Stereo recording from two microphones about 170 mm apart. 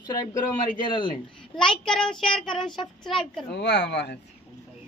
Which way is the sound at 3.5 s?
80° left.